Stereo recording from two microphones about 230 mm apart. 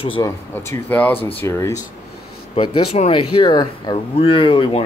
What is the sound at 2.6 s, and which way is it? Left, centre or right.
Speech, left.